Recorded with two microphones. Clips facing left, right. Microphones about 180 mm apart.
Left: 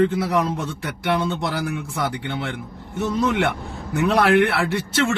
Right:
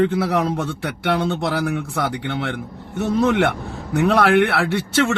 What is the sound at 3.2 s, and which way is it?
Speech, 45° right (ahead or behind).